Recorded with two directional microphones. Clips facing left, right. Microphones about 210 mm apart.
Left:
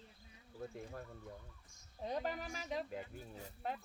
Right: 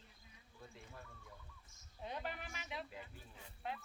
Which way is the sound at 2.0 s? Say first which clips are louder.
Left 6 dB; 40° left (ahead or behind).